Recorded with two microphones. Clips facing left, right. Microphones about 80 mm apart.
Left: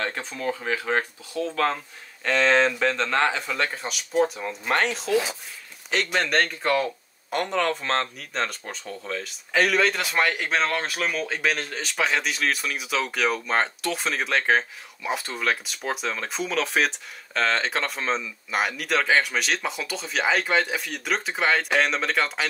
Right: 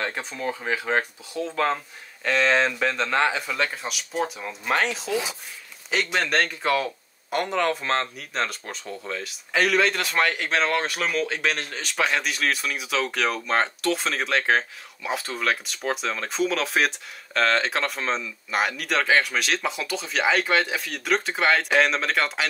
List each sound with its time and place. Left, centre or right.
0.0 s speech: centre
2.2 s speech: centre